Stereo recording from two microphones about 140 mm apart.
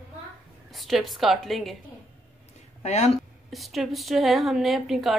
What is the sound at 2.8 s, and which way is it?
Speech, 55° left (ahead or behind).